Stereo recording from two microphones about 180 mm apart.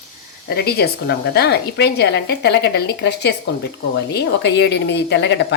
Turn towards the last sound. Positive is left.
turn(degrees=70)  # may be behind; listen again after turning